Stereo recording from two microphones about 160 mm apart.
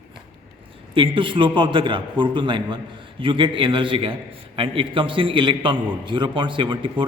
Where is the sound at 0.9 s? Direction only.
30° right (ahead or behind).